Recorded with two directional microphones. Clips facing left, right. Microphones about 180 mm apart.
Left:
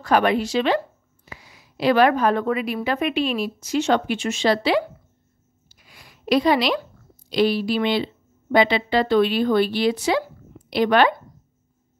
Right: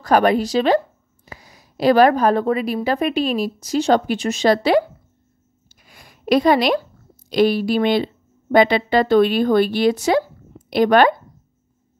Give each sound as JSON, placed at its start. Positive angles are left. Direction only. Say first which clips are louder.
{"t": 0.0, "sound": "a woman's voice", "louder": "right 3 dB", "side_deg": -40}
{"t": 5.7, "sound": "a sound", "louder": "right 2 dB", "side_deg": -45}
{"t": 7.2, "sound": "speech", "louder": "right 3 dB", "side_deg": -50}